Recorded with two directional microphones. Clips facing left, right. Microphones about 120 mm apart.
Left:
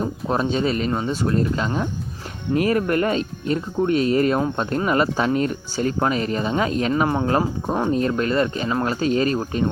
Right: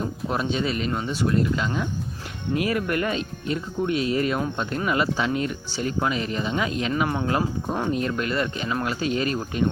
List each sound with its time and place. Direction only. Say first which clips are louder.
0.0 s speech: left 4 dB; 35° left (ahead or behind)